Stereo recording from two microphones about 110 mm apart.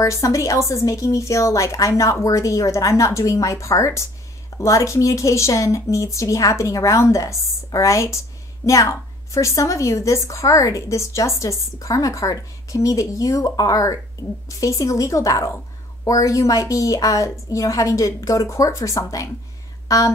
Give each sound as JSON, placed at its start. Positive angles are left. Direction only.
{"t": 0.0, "sound": "a woman's voice", "side_deg": 30}